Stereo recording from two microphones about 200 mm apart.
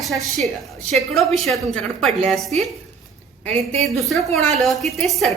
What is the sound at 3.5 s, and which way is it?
Speech, 30° right (ahead or behind).